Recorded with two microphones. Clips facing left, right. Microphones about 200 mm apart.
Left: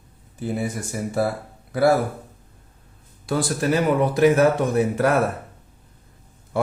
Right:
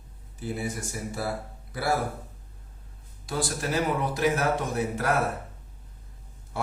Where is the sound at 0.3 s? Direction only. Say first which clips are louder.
Left 6 dB; 55° left (ahead or behind).